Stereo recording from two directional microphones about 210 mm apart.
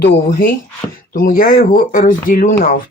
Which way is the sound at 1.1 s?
40° left (ahead or behind).